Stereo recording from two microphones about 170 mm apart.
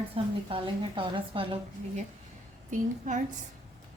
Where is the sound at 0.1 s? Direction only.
30° right (ahead or behind).